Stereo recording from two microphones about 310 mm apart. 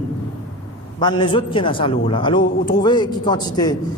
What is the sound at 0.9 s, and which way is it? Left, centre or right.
A man's voice, centre.